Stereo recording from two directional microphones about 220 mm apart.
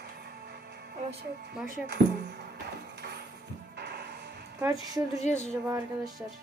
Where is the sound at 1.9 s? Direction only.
45° right (ahead or behind).